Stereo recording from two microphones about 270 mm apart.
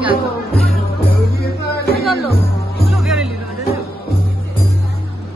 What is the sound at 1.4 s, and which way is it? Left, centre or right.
Music, left.